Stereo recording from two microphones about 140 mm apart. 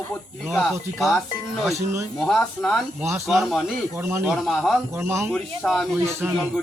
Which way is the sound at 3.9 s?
15° right (ahead or behind).